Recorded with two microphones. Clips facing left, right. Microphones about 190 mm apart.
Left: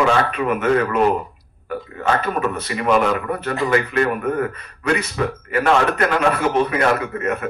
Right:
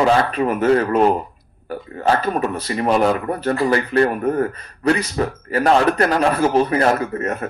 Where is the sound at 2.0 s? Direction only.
35° right (ahead or behind).